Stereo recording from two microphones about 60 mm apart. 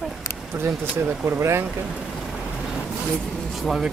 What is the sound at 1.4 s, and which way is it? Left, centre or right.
Speech, right.